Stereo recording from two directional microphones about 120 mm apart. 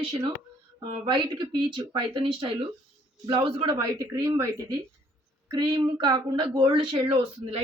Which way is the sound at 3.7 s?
30° right (ahead or behind).